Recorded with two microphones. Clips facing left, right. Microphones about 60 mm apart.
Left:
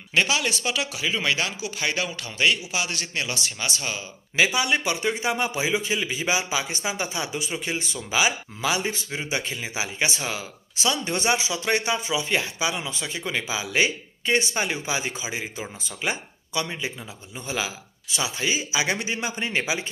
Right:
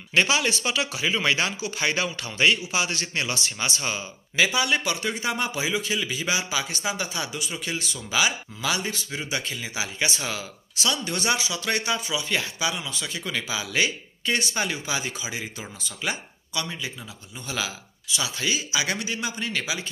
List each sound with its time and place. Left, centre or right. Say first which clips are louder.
0.1 s a man's voice: right 1 dB; centre
4.4 s a man's voice: left 1 dB; centre; by 19.8 s left